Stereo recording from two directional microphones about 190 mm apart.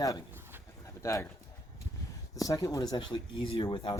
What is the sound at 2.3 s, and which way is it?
Speech, 15° left (ahead or behind).